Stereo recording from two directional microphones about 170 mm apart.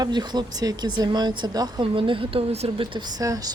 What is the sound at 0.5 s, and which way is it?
Speech, 25° right (ahead or behind).